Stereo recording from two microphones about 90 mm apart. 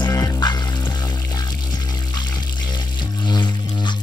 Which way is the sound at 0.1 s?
45° left (ahead or behind).